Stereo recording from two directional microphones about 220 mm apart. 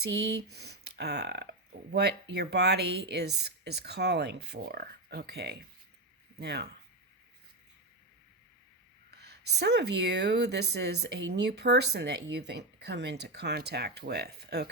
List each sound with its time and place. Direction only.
0.0 s speech: 50° right (ahead or behind)
9.0 s speech: 50° right (ahead or behind)